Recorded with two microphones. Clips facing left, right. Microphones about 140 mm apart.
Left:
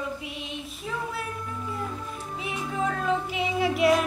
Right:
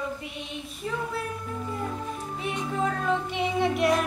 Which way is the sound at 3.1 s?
Centre (ahead or behind).